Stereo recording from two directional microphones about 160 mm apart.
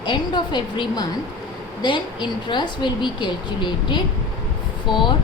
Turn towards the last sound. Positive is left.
turn(degrees=0)  # may be behind; listen again after turning